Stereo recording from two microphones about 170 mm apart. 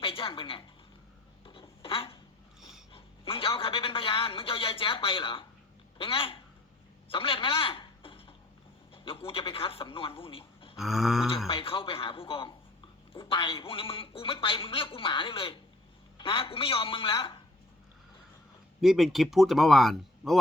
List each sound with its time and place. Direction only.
0.0 s a woman's voice: 30° left (ahead or behind)
1.5 s writing: 30° left (ahead or behind)
2.6 s a sound: centre (ahead or behind)
2.9 s a man's voice: 30° left (ahead or behind)
7.1 s a sound: 30° left (ahead or behind)
9.0 s a man's voice: 30° left (ahead or behind)
10.8 s speech: centre (ahead or behind)
11.4 s a man's voice: 30° left (ahead or behind)
18.8 s speech: centre (ahead or behind)